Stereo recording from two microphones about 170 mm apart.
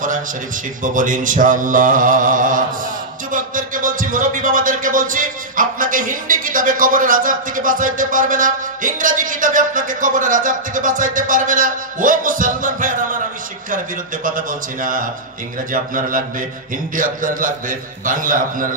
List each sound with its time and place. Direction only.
0.8 s mantra: 50° right (ahead or behind)
14.2 s mantra: 55° right (ahead or behind)